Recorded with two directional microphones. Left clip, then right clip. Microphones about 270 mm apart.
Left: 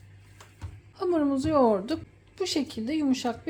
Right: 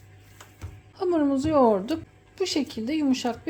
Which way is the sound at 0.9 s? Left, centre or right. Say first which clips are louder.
Right 2 dB; centre.